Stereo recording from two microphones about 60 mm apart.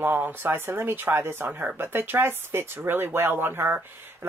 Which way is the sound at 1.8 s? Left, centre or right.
Right.